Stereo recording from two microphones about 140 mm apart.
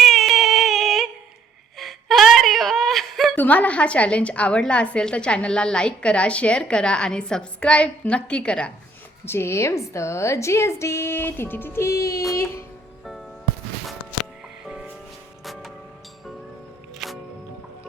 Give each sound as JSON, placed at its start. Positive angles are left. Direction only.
{"t": 0.0, "sound": "a sound", "side_deg": 0}
{"t": 1.8, "sound": "whimper", "side_deg": 0}
{"t": 3.3, "sound": "a woman's voice", "side_deg": 10}
{"t": 9.2, "sound": "a woman's voice", "side_deg": 15}
{"t": 14.6, "sound": "music", "side_deg": -10}
{"t": 17.0, "sound": "music", "side_deg": 0}